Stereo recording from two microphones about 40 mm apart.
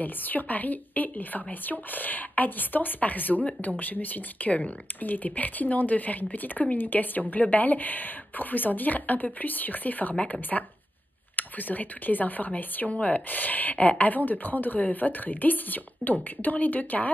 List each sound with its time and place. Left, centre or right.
0.0 s speech: left
10.5 s speech: centre
11.3 s speech: left